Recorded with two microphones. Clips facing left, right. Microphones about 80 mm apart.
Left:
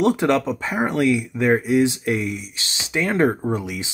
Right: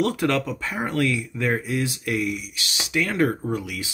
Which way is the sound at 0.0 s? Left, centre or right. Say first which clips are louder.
Left 4 dB; left.